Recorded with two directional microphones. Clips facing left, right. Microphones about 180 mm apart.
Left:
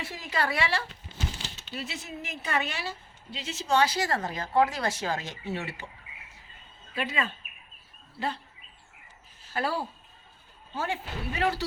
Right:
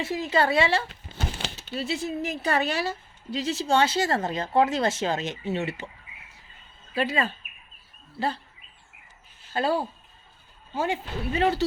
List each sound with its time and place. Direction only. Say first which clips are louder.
0.0 s a woman's voice: right 7 dB; 25° right (ahead or behind)
1.2 s crumpling: right 4 dB; 60° right (ahead or behind)
1.5 s a woman's voice: right 8 dB; 35° right (ahead or behind)
6.9 s speech: right 5 dB; 35° right (ahead or behind)
9.5 s a woman's voice: right 5 dB; 25° right (ahead or behind)